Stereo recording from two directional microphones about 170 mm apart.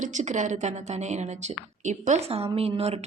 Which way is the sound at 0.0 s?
45° right (ahead or behind).